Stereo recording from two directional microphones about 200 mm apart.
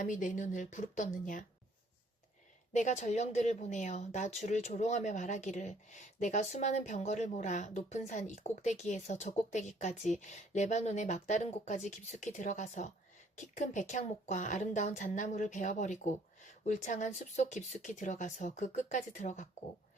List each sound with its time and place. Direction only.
0.0 s a woman's voice: 40° left (ahead or behind)
2.7 s a woman's voice: 35° left (ahead or behind)